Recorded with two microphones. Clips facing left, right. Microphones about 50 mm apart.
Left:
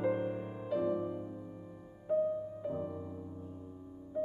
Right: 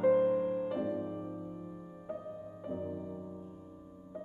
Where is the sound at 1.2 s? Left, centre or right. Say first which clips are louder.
Right 2 dB; right.